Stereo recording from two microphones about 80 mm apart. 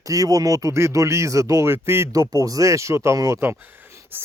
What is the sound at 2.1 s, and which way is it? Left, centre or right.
Speech, right.